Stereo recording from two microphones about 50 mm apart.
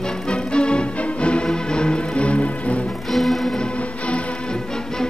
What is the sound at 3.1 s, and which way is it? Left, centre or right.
Music, centre.